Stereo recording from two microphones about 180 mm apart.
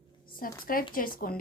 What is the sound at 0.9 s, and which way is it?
Speech, 50° left (ahead or behind).